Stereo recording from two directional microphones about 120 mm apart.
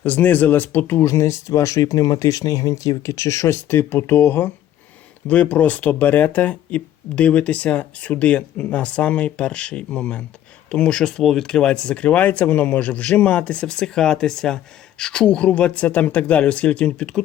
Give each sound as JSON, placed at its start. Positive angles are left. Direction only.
{"t": 0.0, "sound": "speech", "side_deg": 15}